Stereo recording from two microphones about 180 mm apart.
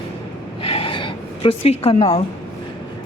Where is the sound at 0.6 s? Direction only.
30° left (ahead or behind).